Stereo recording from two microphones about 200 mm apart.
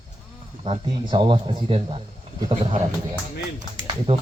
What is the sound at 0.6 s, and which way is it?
Speech, 25° right (ahead or behind).